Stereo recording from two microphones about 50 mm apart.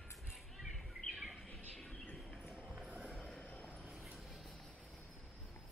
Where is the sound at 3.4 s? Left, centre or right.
Left.